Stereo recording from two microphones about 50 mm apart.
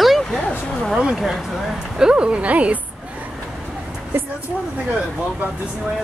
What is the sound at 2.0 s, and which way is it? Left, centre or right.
Speech, centre.